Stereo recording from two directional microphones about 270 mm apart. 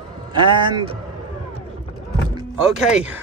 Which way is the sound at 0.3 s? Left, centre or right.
Centre.